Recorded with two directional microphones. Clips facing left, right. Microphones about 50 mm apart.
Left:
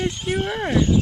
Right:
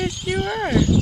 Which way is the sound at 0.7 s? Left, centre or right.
Left.